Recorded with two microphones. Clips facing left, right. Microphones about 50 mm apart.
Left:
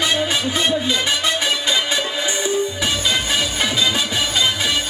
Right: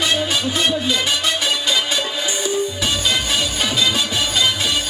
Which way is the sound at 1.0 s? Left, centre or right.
Centre.